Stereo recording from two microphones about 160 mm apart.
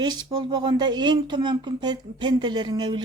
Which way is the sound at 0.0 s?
25° right (ahead or behind).